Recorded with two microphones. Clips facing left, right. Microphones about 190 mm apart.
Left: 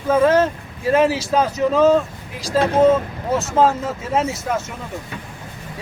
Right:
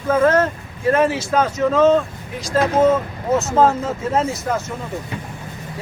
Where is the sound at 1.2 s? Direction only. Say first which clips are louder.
Even; 15° left (ahead or behind).